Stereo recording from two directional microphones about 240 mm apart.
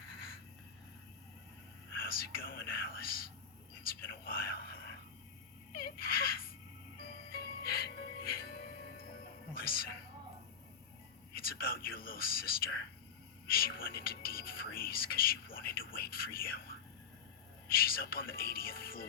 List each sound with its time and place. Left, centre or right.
0.0 s vehicle: left
2.0 s speech: left
5.7 s music: left
9.6 s a woman's voice: left
11.3 s speech: left
17.7 s speech: left